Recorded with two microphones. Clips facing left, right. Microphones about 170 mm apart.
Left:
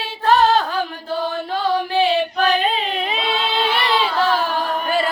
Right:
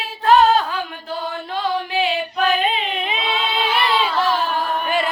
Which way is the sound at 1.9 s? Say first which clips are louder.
Left 3 dB; 35° left (ahead or behind).